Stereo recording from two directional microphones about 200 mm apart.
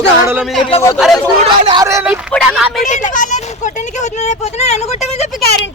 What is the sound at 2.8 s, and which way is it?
Speech, 40° left (ahead or behind).